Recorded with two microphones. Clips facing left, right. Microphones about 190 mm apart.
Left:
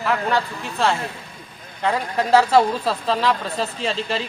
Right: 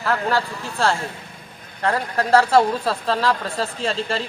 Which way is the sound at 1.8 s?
Centre (ahead or behind).